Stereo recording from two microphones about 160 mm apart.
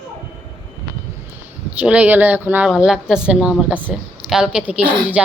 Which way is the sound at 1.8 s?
10° right (ahead or behind).